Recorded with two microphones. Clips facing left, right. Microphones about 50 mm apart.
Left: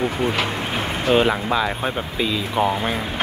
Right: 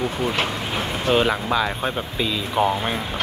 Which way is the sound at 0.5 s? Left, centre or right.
Left.